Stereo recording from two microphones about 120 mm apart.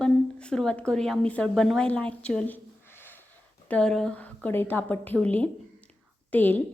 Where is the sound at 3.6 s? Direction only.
5° left (ahead or behind).